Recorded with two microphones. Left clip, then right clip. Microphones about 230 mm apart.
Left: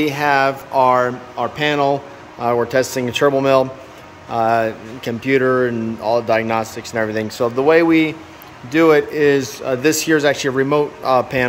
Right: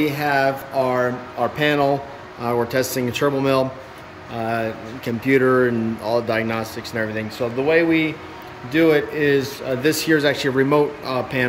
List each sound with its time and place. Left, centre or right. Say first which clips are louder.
0.0 s speech: left 3 dB; centre
7.2 s speech: left 5 dB; left